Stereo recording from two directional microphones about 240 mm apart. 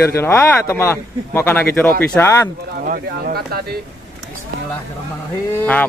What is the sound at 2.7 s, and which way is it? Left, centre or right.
Speech, right.